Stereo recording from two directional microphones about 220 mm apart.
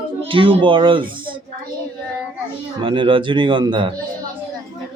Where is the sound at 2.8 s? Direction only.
25° right (ahead or behind).